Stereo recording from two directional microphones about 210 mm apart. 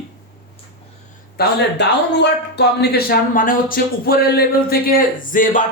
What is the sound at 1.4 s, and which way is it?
A man's voice, 55° left (ahead or behind).